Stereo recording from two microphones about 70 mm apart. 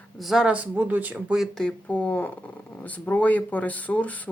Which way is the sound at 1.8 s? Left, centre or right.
Left.